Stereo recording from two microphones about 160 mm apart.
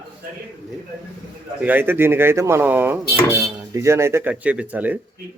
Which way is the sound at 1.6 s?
10° right (ahead or behind).